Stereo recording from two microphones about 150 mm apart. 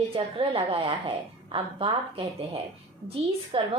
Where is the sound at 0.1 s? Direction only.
40° right (ahead or behind).